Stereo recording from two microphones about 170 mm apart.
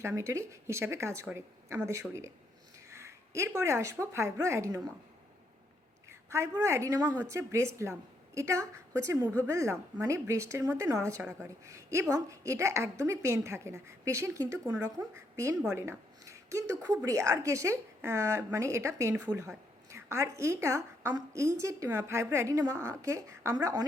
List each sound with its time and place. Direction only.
0.0 s a woman's voice: 15° right (ahead or behind)
6.1 s a woman's voice: 15° right (ahead or behind)